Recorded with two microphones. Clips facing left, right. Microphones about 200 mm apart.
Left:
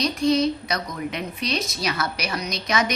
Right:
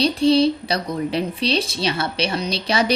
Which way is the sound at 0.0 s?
30° right (ahead or behind).